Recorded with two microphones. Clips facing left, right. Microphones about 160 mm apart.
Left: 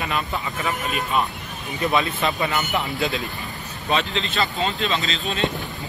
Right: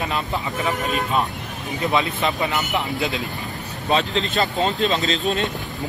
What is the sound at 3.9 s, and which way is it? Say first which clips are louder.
Speech: right 3 dB; 40° right (ahead or behind).